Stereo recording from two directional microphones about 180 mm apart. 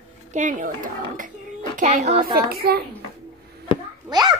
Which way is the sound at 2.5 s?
60° right (ahead or behind).